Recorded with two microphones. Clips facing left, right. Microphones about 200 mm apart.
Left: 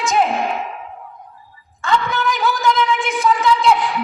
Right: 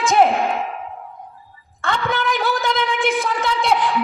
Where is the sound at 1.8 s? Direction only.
55° right (ahead or behind).